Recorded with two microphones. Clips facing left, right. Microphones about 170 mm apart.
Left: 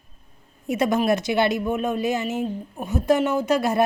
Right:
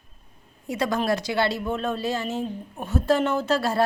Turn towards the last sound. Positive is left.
turn(degrees=15)  # may be behind; listen again after turning